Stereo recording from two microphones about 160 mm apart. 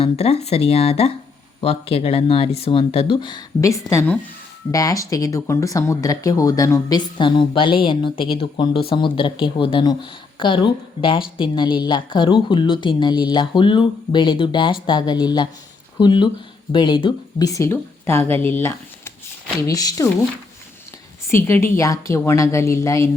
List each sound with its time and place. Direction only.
0.0 s speech: 40° left (ahead or behind); by 20.1 s 20° left (ahead or behind)
21.2 s a woman's voice: 15° left (ahead or behind)